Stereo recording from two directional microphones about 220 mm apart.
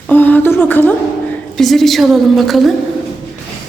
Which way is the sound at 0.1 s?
10° left (ahead or behind).